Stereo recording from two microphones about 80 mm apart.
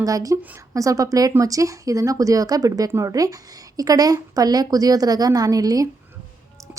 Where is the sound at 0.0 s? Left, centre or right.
Right.